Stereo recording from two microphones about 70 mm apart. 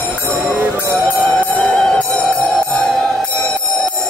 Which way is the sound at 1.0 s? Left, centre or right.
Centre.